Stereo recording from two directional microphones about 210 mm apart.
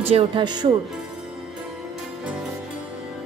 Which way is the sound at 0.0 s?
25° right (ahead or behind).